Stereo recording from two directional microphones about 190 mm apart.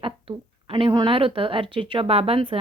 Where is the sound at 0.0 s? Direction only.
30° right (ahead or behind).